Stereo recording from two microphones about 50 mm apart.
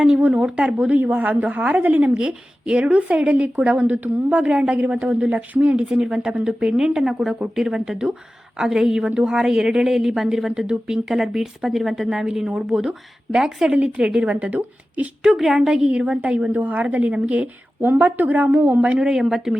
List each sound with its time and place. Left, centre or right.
0.2 s a woman's voice: right
2.0 s a woman's voice: centre
15.2 s a woman's voice: centre
15.9 s a woman's voice: right
17.2 s a woman's voice: right
17.7 s a woman's voice: right
19.0 s a woman's voice: centre